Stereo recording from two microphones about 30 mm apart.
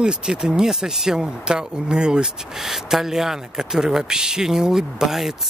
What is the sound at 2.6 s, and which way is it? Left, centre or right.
Speech, centre.